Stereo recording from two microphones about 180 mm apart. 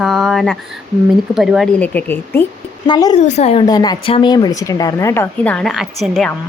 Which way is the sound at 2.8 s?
25° left (ahead or behind).